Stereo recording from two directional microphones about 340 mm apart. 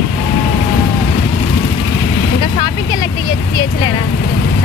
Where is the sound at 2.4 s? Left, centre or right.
Centre.